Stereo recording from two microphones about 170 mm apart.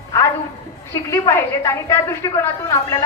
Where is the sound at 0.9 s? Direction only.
15° left (ahead or behind).